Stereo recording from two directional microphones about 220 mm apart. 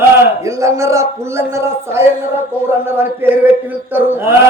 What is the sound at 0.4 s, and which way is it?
A man's voice, 15° right (ahead or behind).